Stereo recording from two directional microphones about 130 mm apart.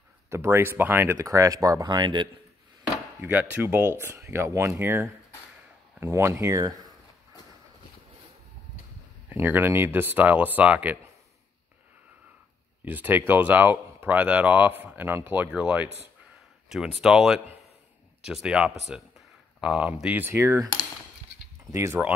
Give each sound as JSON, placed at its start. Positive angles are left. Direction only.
{"t": 0.3, "sound": "speech", "side_deg": -20}
{"t": 3.2, "sound": "speech", "side_deg": -15}
{"t": 9.3, "sound": "speech", "side_deg": -15}
{"t": 12.8, "sound": "speech", "side_deg": -15}
{"t": 21.7, "sound": "speech", "side_deg": -20}